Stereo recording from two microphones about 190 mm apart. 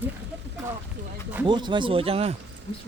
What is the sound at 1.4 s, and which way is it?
Speech, 25° right (ahead or behind).